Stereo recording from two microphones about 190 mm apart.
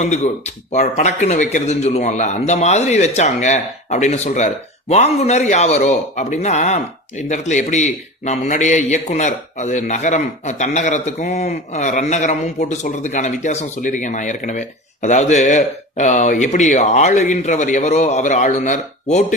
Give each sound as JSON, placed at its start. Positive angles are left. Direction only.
{"t": 0.0, "sound": "a man's voice", "side_deg": 40}